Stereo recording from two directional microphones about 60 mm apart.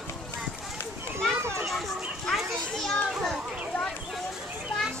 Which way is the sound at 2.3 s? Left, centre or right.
Centre.